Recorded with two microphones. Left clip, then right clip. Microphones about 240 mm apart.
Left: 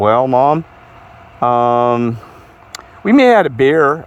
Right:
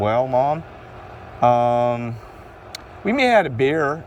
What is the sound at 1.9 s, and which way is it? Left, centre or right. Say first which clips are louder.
Speech: left 11 dB; left.